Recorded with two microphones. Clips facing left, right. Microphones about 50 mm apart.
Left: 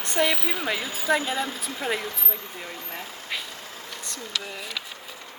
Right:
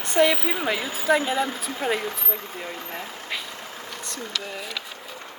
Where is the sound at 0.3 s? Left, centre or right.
Centre.